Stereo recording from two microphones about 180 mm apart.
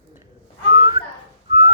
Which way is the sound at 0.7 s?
25° right (ahead or behind).